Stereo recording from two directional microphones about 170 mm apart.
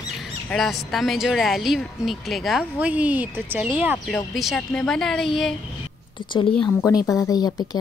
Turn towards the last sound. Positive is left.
turn(degrees=25)  # may be behind; listen again after turning